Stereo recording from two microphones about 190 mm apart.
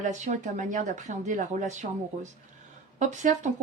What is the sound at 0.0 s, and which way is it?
Speech, 40° right (ahead or behind).